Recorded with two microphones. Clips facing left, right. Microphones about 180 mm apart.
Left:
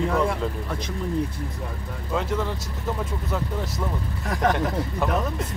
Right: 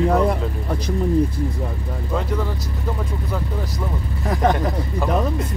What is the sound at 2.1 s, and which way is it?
Speech, centre (ahead or behind).